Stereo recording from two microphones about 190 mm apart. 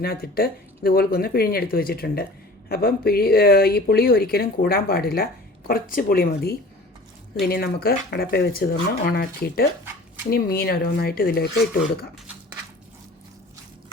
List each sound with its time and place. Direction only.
0.0 s speech: 50° left (ahead or behind)